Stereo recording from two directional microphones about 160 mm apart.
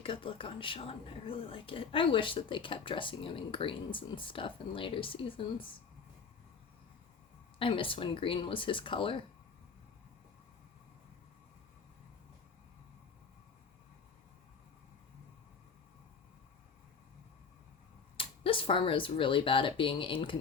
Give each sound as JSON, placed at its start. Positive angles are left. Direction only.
{"t": 0.0, "sound": "speech", "side_deg": 35}
{"t": 7.6, "sound": "speech", "side_deg": 35}
{"t": 18.2, "sound": "speech", "side_deg": 35}